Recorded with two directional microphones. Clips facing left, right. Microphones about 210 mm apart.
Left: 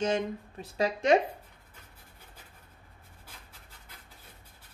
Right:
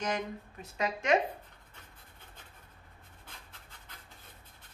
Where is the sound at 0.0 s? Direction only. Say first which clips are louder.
Left 6 dB; 30° left (ahead or behind).